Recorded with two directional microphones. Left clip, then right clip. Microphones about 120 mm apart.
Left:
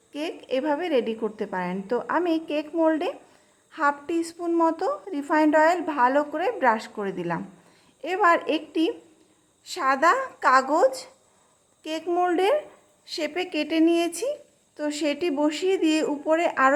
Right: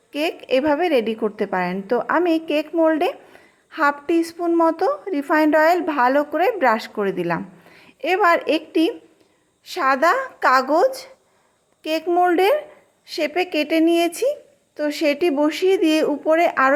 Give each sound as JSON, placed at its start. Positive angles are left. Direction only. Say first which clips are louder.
{"t": 0.1, "sound": "a woman's voice", "louder": "right 8 dB", "side_deg": -35}
{"t": 11.8, "sound": "speech", "louder": "right 8 dB", "side_deg": -35}
{"t": 12.0, "sound": "speech", "louder": "right 6 dB", "side_deg": -15}
{"t": 12.3, "sound": "a woman's voice", "louder": "right 5 dB", "side_deg": -30}